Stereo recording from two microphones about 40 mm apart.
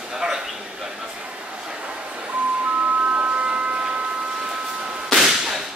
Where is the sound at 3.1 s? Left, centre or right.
Right.